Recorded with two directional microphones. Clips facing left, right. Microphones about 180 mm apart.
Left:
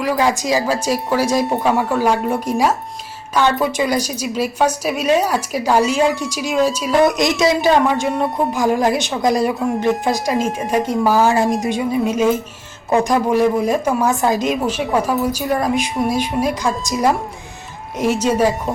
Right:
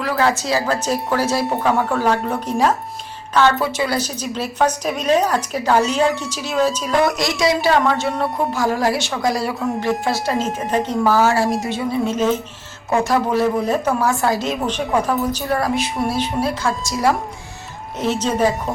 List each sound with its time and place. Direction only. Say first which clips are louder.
0.0 s a woman's voice: left 2 dB; 15° left (ahead or behind)